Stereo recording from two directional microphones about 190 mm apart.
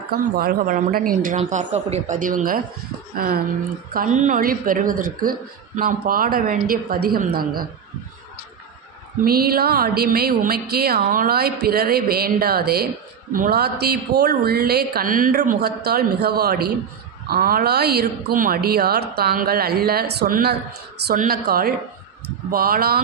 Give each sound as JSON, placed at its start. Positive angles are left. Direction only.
{"t": 0.1, "sound": "speech", "side_deg": -50}
{"t": 9.2, "sound": "a woman's voice", "side_deg": -55}